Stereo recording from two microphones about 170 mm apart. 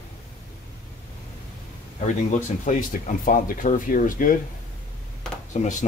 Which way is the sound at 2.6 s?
50° left (ahead or behind).